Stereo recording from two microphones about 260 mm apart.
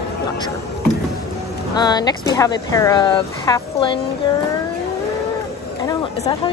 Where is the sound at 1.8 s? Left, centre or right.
Centre.